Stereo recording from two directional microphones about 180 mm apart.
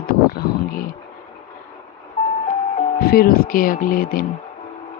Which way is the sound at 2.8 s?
55° left (ahead or behind).